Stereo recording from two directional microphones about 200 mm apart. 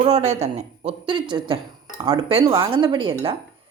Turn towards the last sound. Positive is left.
turn(degrees=-25)  # may be behind; listen again after turning